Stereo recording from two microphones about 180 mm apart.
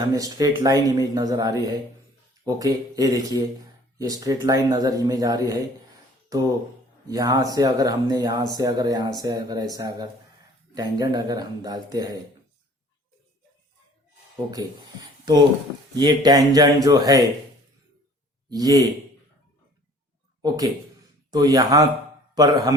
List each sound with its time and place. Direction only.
0.1 s speech: 20° right (ahead or behind)
15.2 s speech: 25° right (ahead or behind)
18.5 s speech: 20° right (ahead or behind)
21.2 s speech: 20° right (ahead or behind)